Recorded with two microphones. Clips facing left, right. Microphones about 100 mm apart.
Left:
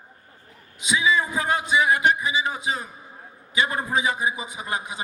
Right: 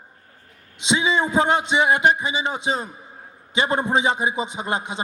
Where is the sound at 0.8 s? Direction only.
25° right (ahead or behind).